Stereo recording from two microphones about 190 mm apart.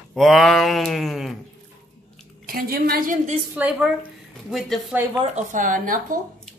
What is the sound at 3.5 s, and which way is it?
Speech, 5° right (ahead or behind).